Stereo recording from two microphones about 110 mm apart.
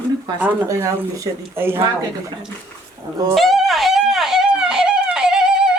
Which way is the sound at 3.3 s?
Centre (ahead or behind).